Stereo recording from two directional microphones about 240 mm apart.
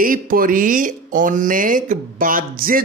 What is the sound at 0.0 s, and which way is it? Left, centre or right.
Speech, right.